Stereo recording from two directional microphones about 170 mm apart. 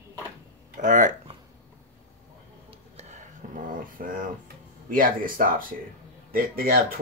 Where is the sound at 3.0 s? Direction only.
45° right (ahead or behind).